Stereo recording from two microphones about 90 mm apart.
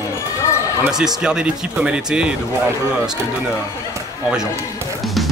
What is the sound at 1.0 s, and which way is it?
Speech, 10° right (ahead or behind).